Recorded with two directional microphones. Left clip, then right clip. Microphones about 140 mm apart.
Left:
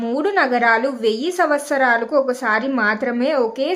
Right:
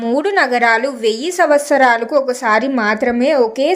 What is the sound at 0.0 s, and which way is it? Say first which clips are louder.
A woman's voice: right 4 dB; 20° right (ahead or behind).